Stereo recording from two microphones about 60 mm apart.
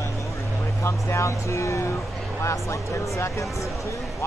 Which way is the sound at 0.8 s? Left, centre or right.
Left.